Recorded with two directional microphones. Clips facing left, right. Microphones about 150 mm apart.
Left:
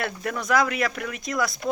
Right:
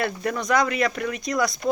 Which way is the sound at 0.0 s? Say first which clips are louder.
Right 3 dB; centre (ahead or behind).